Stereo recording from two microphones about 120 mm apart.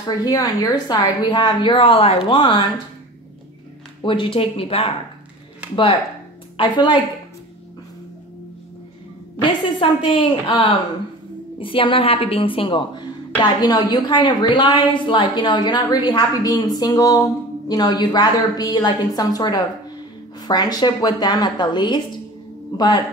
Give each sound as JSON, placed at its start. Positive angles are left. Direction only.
{"t": 0.0, "sound": "a woman's voice", "side_deg": 35}
{"t": 4.0, "sound": "speech", "side_deg": 45}
{"t": 5.6, "sound": "a sound", "side_deg": -10}
{"t": 6.5, "sound": "a woman's voice", "side_deg": 45}
{"t": 9.4, "sound": "a woman's voice", "side_deg": 45}